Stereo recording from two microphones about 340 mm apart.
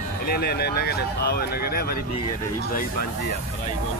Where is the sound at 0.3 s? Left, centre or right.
Left.